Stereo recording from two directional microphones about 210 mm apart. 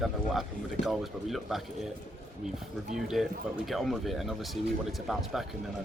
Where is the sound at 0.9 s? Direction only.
Centre (ahead or behind).